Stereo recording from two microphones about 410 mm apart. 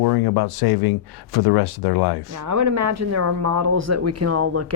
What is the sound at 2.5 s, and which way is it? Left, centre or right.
Speech, right.